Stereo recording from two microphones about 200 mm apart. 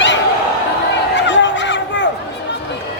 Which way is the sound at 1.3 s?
65° left (ahead or behind).